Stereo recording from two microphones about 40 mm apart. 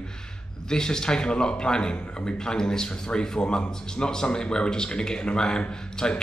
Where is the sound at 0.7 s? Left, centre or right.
Centre.